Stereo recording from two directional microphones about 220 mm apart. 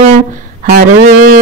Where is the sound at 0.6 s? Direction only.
45° right (ahead or behind).